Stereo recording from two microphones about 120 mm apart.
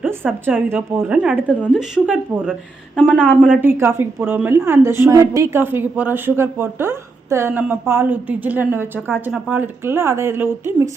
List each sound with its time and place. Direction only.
0.0 s a woman's voice: 15° right (ahead or behind)
2.9 s a woman's voice: 5° left (ahead or behind)
3.4 s a woman's voice: 15° right (ahead or behind)